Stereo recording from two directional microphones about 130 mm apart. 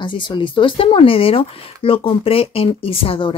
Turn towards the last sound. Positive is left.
turn(degrees=45)  # may be behind; listen again after turning